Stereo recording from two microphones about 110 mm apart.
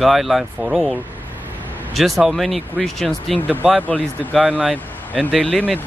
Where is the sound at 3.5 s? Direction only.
15° right (ahead or behind).